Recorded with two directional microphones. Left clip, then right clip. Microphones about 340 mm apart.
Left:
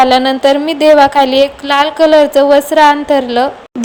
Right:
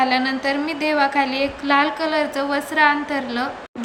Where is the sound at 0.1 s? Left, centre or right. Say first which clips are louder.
Left 12 dB; centre.